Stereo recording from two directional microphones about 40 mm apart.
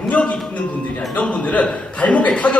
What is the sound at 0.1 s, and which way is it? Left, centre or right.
A man's voice, left.